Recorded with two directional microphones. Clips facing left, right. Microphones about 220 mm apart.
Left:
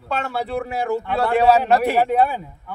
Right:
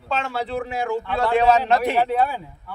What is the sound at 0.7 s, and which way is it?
A man's voice, 40° left (ahead or behind).